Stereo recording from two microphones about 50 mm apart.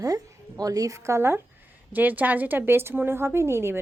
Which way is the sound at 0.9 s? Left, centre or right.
Right.